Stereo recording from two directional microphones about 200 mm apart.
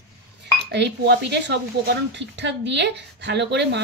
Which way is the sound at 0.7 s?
60° right (ahead or behind).